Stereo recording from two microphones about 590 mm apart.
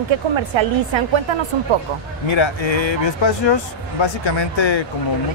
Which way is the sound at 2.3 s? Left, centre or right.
Left.